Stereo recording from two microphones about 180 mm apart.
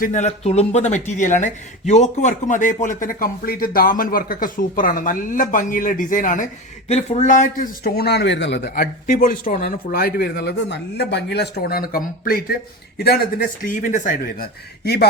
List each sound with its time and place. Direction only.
0.0 s speech: 40° left (ahead or behind)
13.6 s speech: 50° left (ahead or behind)